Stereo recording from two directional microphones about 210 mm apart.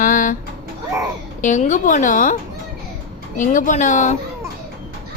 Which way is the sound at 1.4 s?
35° left (ahead or behind).